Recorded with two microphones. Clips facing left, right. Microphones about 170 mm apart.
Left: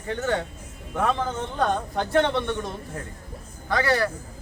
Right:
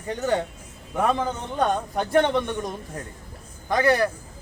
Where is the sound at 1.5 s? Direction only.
15° right (ahead or behind).